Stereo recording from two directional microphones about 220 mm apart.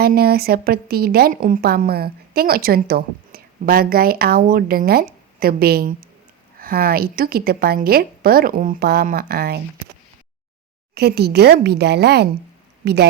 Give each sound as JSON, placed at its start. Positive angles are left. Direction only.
{"t": 0.0, "sound": "a woman's voice", "side_deg": -45}
{"t": 10.9, "sound": "a woman's voice", "side_deg": -45}